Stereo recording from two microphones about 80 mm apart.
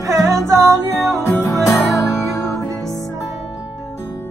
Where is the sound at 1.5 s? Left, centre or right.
Left.